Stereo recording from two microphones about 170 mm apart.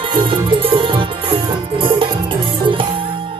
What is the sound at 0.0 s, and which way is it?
Music, 30° right (ahead or behind).